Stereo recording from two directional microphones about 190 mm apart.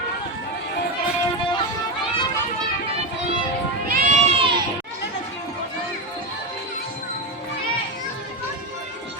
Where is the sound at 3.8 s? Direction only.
50° right (ahead or behind).